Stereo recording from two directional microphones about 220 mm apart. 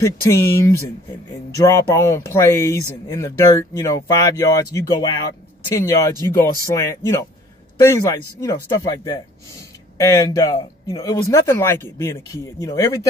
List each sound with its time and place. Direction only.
0.0 s speech: 10° left (ahead or behind)